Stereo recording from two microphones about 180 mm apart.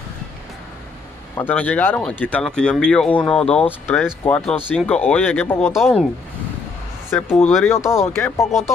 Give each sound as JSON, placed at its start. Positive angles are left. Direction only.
{"t": 1.3, "sound": "speech", "side_deg": 10}
{"t": 5.7, "sound": "speech", "side_deg": 0}
{"t": 7.1, "sound": "speech", "side_deg": 5}
{"t": 8.5, "sound": "speech", "side_deg": 0}